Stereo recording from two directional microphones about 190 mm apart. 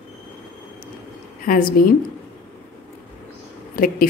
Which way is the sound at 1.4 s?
50° left (ahead or behind).